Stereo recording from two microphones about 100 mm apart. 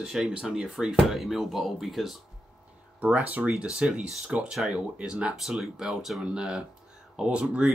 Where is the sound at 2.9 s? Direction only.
15° right (ahead or behind).